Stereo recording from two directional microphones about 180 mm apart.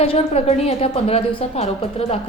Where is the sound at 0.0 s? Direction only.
35° left (ahead or behind).